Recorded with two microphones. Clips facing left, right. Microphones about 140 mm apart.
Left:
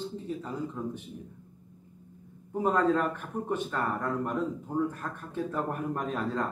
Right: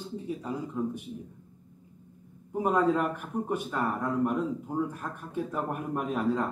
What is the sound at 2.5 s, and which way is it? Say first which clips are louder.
Speech: even; 10° right (ahead or behind).